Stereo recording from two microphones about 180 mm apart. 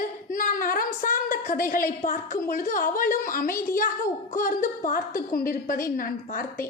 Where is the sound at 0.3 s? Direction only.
50° left (ahead or behind).